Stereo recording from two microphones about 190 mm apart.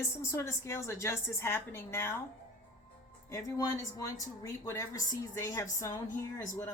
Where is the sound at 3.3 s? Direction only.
15° left (ahead or behind).